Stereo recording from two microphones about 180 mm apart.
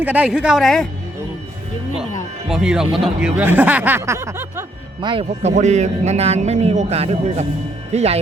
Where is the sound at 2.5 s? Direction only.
5° right (ahead or behind).